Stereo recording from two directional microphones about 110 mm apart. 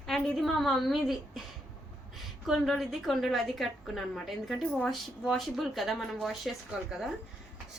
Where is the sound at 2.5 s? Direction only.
Centre (ahead or behind).